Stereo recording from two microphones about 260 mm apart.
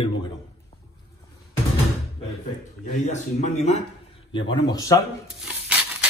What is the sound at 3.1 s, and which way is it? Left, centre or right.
Speech, left.